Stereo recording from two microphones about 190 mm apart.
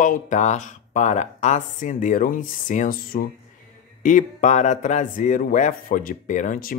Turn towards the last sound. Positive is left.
turn(degrees=45)  # may be behind; listen again after turning